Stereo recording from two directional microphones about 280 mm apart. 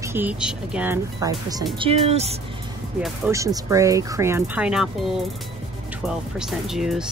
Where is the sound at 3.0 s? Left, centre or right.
Centre.